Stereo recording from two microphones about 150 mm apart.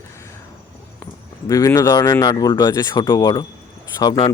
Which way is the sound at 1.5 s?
20° left (ahead or behind).